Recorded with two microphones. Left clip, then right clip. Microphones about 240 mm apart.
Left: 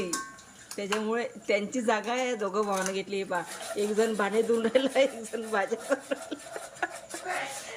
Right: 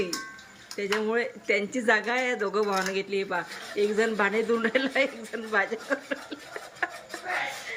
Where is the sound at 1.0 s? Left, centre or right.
Centre.